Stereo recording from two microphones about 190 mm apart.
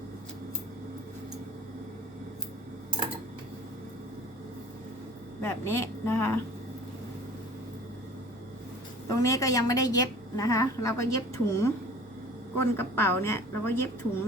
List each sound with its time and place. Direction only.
5.4 s a woman's voice: 15° left (ahead or behind)
9.0 s a woman's voice: 15° left (ahead or behind)